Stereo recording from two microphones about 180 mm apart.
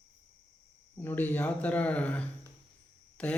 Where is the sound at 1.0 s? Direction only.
10° left (ahead or behind).